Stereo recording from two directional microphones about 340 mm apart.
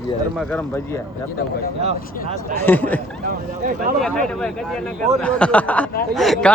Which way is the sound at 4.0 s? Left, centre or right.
Centre.